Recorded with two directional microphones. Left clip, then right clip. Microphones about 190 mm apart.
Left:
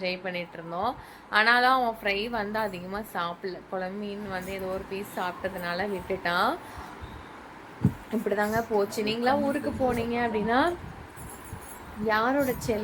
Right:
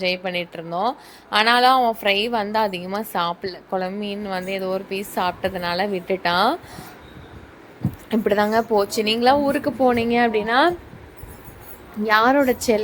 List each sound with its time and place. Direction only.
0.0 s a woman's voice: 40° right (ahead or behind)
8.1 s a woman's voice: 50° right (ahead or behind)
12.0 s a woman's voice: 55° right (ahead or behind)